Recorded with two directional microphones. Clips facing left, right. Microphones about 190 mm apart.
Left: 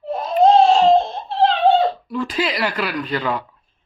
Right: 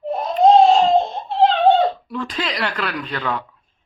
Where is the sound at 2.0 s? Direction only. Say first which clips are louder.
Left 3 dB; 5° left (ahead or behind).